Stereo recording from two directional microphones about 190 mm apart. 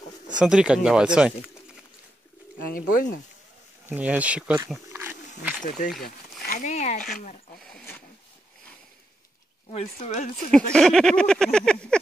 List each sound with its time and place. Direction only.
0.4 s speech: 5° right (ahead or behind)
2.7 s speech: 50° left (ahead or behind)
3.8 s speech: 10° right (ahead or behind)
5.6 s speech: 45° left (ahead or behind)
9.7 s speech: 30° left (ahead or behind)
10.5 s speech: 5° left (ahead or behind)